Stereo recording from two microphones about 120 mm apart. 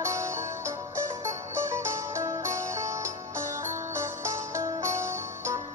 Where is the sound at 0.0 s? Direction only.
25° right (ahead or behind).